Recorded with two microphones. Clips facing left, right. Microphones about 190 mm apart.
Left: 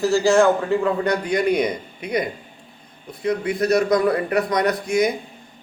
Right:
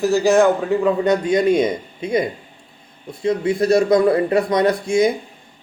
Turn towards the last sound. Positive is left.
turn(degrees=-25)  # may be behind; listen again after turning